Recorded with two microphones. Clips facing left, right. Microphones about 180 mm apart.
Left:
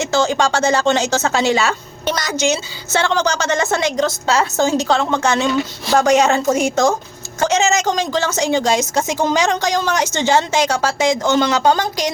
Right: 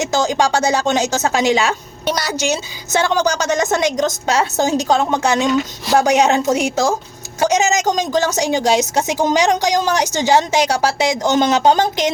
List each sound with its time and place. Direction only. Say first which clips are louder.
0.0 s a woman's voice: even; 15° right (ahead or behind)